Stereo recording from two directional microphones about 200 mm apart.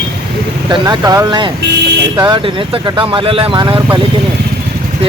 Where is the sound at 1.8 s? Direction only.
60° right (ahead or behind).